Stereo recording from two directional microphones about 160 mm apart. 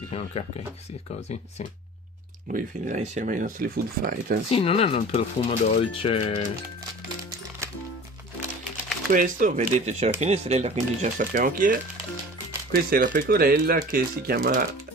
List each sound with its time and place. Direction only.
0.1 s speech: 40° left (ahead or behind)
2.5 s speech: 50° right (ahead or behind); by 4.4 s 70° right (ahead or behind)
4.5 s speech: 40° left (ahead or behind)
9.1 s speech: 55° right (ahead or behind)